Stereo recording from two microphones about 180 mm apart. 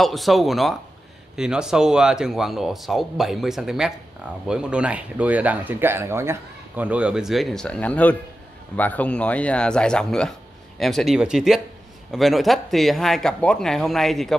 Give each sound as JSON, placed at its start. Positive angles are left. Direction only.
{"t": 0.0, "sound": "speech", "side_deg": 0}